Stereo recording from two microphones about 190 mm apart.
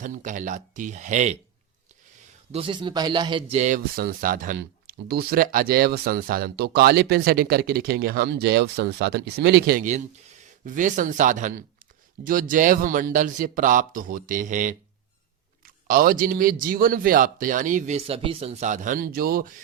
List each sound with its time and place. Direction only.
0.0 s speech: 40° right (ahead or behind)
2.5 s a man's voice: 30° right (ahead or behind)
3.5 s speech: 35° right (ahead or behind)
3.9 s speech: 50° right (ahead or behind)